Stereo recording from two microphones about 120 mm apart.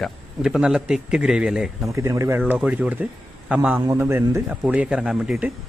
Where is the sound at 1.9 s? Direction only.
25° right (ahead or behind).